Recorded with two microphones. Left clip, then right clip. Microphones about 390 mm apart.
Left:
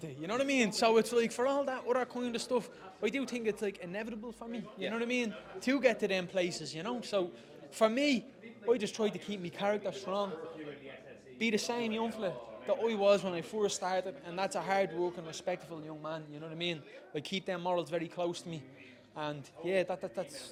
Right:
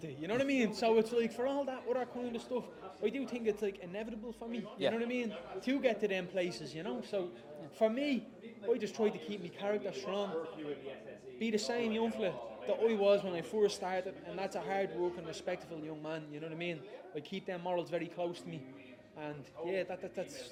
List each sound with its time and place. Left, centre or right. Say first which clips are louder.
0.0 s a man's voice: left 1 dB; left
11.3 s a man's voice: left 2 dB; left
17.2 s a man's voice: left 5 dB; left
19.2 s a man's voice: left 4 dB; left